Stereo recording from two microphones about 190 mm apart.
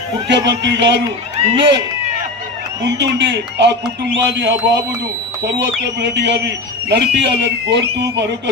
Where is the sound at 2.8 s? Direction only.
65° right (ahead or behind).